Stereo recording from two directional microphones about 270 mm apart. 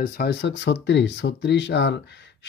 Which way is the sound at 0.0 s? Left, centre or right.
Left.